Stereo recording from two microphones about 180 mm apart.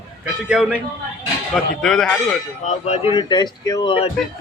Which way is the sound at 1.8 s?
5° left (ahead or behind).